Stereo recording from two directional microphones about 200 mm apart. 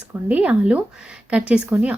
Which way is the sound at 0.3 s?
5° right (ahead or behind).